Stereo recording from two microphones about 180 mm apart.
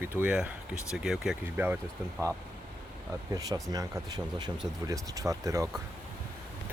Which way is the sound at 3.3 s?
20° right (ahead or behind).